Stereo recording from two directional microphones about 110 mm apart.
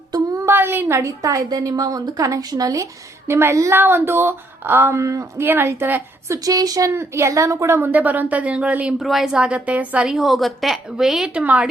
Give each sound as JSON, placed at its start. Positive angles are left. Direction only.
{"t": 0.4, "sound": "a woman's voice", "side_deg": -20}
{"t": 9.0, "sound": "a woman's voice", "side_deg": 0}
{"t": 11.4, "sound": "a woman's voice", "side_deg": -15}